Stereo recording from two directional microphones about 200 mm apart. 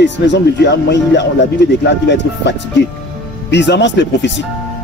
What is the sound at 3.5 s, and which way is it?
Speech, 60° left (ahead or behind).